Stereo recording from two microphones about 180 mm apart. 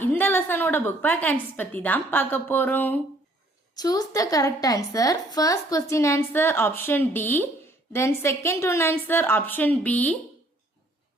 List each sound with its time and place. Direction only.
0.0 s a woman's voice: 10° left (ahead or behind)
3.8 s a woman's voice: 20° left (ahead or behind)